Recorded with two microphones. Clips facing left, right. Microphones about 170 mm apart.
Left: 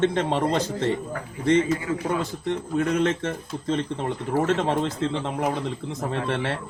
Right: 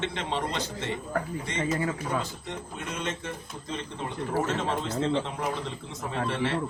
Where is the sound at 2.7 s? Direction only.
60° left (ahead or behind).